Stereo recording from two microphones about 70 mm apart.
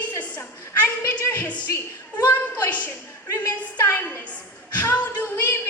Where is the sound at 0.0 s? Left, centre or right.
Left.